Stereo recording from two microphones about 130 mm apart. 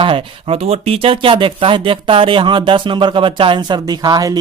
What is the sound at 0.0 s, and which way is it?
Speech, 45° right (ahead or behind).